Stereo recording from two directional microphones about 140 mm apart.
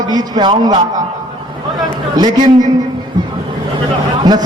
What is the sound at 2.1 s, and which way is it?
Speech, 30° right (ahead or behind).